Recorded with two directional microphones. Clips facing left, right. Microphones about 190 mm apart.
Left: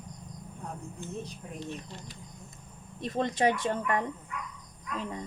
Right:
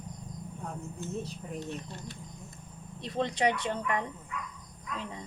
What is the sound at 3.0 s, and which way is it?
A woman's voice, 45° left (ahead or behind).